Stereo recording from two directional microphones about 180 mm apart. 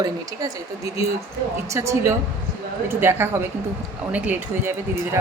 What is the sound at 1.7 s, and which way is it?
Speech, 15° right (ahead or behind).